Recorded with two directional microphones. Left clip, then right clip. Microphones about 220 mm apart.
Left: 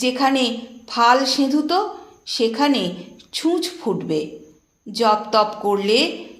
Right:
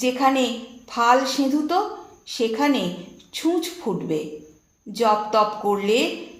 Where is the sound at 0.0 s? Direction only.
40° left (ahead or behind).